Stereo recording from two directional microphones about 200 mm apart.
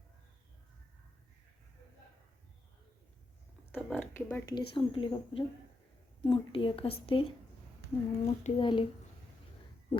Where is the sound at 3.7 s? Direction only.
5° left (ahead or behind).